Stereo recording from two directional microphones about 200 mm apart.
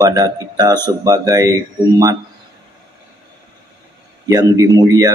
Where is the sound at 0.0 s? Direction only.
15° right (ahead or behind).